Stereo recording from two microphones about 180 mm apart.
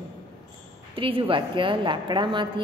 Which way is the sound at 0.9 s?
30° right (ahead or behind).